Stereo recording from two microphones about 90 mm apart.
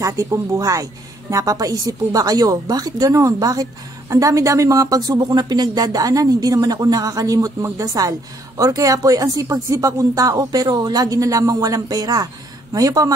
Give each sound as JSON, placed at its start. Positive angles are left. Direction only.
{"t": 0.0, "sound": "speech", "side_deg": -35}